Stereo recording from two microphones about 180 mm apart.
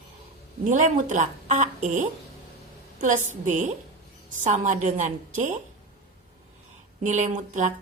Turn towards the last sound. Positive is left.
turn(degrees=-45)  # may be behind; listen again after turning